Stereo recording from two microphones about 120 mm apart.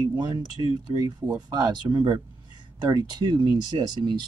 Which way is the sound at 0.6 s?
40° right (ahead or behind).